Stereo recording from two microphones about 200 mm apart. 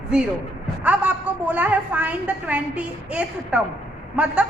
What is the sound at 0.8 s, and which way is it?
A woman's voice, 5° right (ahead or behind).